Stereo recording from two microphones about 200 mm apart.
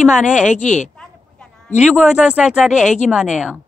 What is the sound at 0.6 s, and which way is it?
Speech, 35° left (ahead or behind).